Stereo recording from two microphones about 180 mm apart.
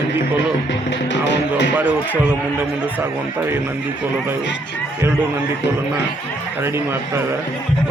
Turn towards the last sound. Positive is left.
turn(degrees=-15)  # may be behind; listen again after turning